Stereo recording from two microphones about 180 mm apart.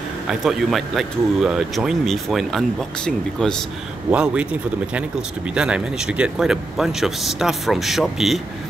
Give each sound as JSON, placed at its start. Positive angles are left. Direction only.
{"t": 0.3, "sound": "a man's voice", "side_deg": 0}